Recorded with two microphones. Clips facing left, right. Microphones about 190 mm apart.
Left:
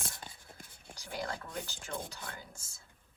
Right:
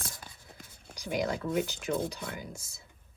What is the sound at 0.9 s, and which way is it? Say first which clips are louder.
Speech: right 8 dB; 15° right (ahead or behind).